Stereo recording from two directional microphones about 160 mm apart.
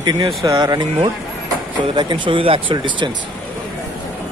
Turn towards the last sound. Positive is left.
turn(degrees=-30)  # may be behind; listen again after turning